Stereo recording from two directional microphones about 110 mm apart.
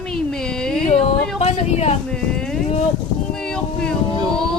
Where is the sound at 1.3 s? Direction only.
75° left (ahead or behind).